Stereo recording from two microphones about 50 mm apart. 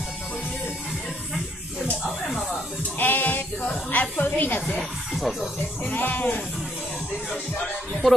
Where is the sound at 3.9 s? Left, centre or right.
Left.